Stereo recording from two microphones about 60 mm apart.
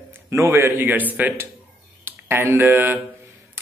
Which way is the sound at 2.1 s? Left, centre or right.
Right.